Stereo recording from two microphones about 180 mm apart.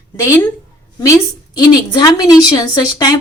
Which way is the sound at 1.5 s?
20° left (ahead or behind).